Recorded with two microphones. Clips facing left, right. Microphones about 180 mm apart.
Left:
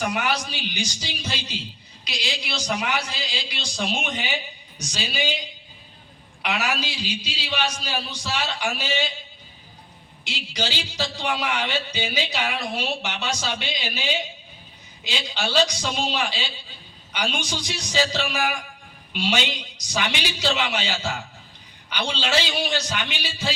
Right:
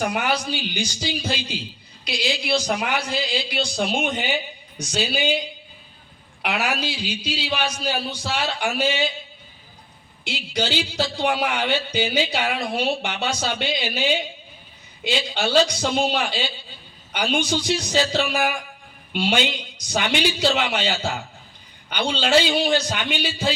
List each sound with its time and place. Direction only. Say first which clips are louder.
0.0 s a man's voice: right 2 dB; 55° right (ahead or behind)
6.4 s a man's voice: right 2 dB; 55° right (ahead or behind)
10.2 s a man's voice: right 4 dB; 55° right (ahead or behind)
15.0 s a man's voice: right 5 dB; 55° right (ahead or behind)